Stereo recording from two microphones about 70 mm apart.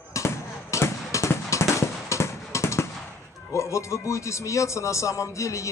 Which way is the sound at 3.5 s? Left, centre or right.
Left.